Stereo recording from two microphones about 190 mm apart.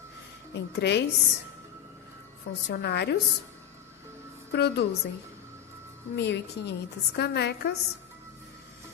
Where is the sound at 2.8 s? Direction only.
60° left (ahead or behind).